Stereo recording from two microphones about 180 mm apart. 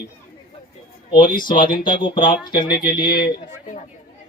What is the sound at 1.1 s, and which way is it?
Speech, 25° left (ahead or behind).